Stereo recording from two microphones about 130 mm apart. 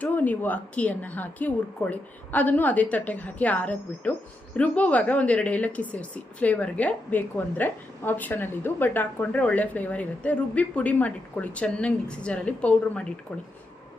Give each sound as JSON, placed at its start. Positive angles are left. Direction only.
{"t": 0.0, "sound": "speech", "side_deg": 15}